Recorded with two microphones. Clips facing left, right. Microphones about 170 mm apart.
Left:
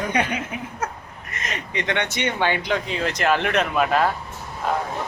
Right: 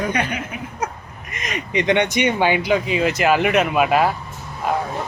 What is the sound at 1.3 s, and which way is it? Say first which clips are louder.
Speech: right 4 dB; 15° right (ahead or behind).